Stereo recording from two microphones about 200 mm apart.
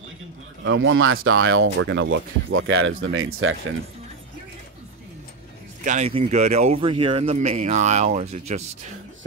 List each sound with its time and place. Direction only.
0.7 s speech: 75° right (ahead or behind)
5.9 s speech: 35° right (ahead or behind)